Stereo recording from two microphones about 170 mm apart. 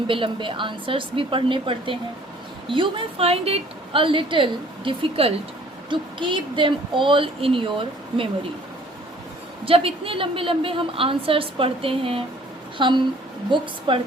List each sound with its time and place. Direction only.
0.1 s a woman's voice: 30° right (ahead or behind)
9.6 s a woman's voice: 35° right (ahead or behind)